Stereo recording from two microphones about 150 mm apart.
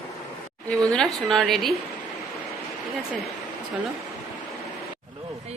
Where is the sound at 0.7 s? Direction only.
5° left (ahead or behind).